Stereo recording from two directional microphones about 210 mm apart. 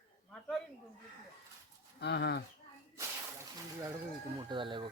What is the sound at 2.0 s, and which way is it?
Speech, 50° left (ahead or behind).